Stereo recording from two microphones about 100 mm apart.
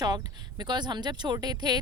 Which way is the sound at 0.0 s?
40° right (ahead or behind).